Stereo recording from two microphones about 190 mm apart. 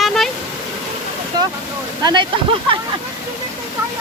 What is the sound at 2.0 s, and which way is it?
Speech, 25° right (ahead or behind).